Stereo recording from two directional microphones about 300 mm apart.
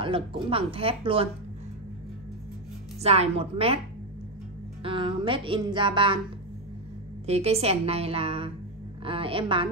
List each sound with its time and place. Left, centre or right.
0.0 s speech: centre
3.0 s a woman's voice: right
4.8 s speech: centre
7.2 s a woman's voice: right